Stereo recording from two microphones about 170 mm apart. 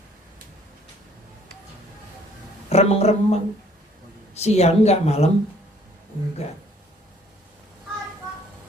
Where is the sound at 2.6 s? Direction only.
40° left (ahead or behind).